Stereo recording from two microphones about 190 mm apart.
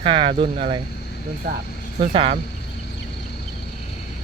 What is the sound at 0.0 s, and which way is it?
Speech, 25° right (ahead or behind).